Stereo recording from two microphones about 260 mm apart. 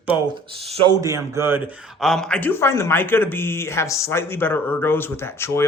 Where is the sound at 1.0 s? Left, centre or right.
Centre.